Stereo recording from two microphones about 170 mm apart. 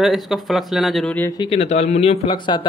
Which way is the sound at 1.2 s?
20° left (ahead or behind).